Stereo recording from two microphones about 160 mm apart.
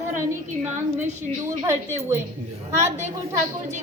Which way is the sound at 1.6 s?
15° right (ahead or behind).